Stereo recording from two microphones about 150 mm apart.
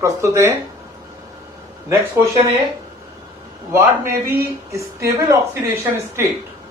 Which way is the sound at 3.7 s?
15° right (ahead or behind).